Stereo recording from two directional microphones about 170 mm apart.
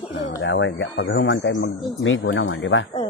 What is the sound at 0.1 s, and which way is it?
Speech, 90° left.